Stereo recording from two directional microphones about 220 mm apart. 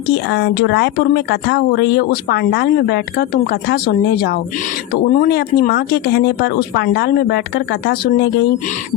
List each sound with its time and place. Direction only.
0.1 s a woman's voice: 50° left (ahead or behind)